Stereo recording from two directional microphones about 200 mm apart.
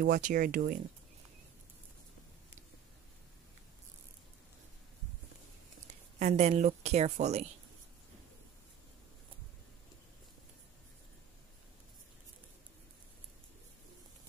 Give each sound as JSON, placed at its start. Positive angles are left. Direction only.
{"t": 0.0, "sound": "speech", "side_deg": -45}
{"t": 6.1, "sound": "a woman's voice", "side_deg": -35}